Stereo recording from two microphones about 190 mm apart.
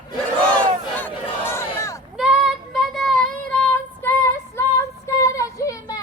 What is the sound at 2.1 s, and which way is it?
Child singing, 5° right (ahead or behind).